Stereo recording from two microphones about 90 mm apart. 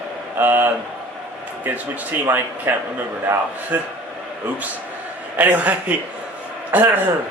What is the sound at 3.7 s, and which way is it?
Speech, 20° right (ahead or behind).